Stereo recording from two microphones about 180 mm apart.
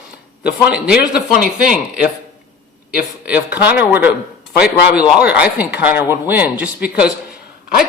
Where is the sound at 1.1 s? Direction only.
55° left (ahead or behind).